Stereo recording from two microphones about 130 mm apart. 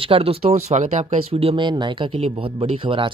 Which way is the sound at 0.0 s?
45° right (ahead or behind).